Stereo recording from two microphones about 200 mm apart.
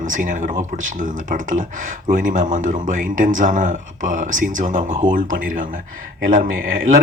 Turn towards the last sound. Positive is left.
turn(degrees=-45)  # may be behind; listen again after turning